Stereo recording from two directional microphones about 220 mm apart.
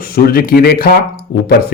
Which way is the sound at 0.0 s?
45° left (ahead or behind).